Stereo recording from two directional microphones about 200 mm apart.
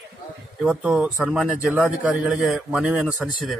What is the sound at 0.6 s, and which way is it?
A man's voice, 5° right (ahead or behind).